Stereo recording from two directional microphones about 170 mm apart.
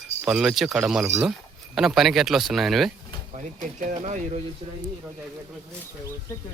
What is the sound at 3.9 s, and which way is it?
Speech, 45° right (ahead or behind).